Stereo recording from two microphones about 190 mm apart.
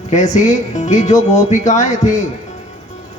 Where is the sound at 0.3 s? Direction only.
40° left (ahead or behind).